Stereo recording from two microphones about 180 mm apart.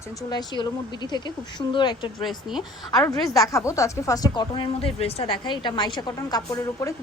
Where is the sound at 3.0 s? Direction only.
20° left (ahead or behind).